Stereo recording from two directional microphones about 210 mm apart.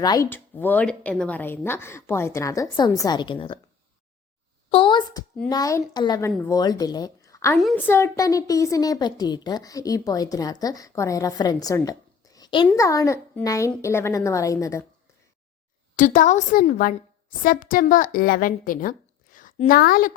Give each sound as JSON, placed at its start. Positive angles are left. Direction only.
{"t": 0.0, "sound": "a woman's voice", "side_deg": 15}
{"t": 4.7, "sound": "a woman's voice", "side_deg": 25}
{"t": 16.0, "sound": "a woman's voice", "side_deg": 35}